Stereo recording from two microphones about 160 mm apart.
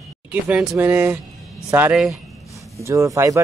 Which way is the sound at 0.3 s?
5° right (ahead or behind).